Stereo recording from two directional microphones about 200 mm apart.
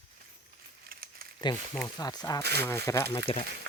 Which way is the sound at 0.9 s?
50° right (ahead or behind).